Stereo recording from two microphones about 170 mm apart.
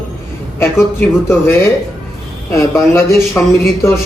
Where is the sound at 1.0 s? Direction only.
10° left (ahead or behind).